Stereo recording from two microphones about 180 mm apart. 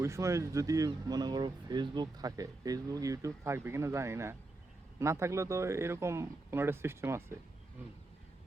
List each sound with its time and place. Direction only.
0.0 s speech: 15° right (ahead or behind)